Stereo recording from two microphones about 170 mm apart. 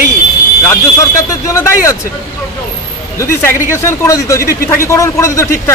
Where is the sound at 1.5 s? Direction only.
15° left (ahead or behind).